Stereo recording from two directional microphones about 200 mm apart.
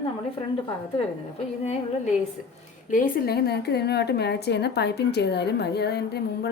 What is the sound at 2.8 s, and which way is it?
A woman's voice, 40° left (ahead or behind).